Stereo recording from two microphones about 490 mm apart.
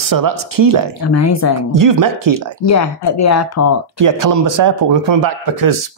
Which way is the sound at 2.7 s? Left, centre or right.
Left.